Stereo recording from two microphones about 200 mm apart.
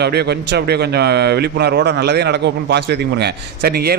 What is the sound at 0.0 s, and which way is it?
A man's voice, 55° right (ahead or behind).